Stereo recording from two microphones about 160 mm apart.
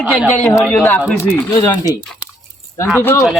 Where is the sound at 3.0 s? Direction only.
15° left (ahead or behind).